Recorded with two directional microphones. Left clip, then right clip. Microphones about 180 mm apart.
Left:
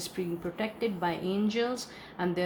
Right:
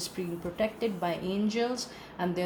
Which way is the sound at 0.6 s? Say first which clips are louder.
Right 2 dB; 30° left (ahead or behind).